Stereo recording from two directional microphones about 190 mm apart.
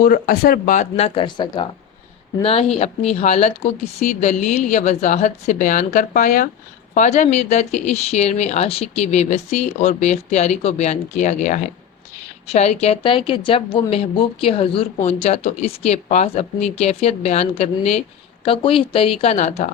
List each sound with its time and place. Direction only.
0.0 s speech: 50° left (ahead or behind); by 4.3 s 30° left (ahead or behind)
4.3 s speech: 45° left (ahead or behind)